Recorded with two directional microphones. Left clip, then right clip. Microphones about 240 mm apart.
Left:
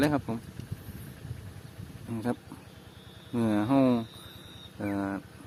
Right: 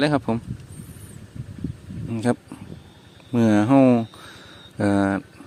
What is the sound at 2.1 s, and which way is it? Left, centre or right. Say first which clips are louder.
Speech: right 10 dB; right.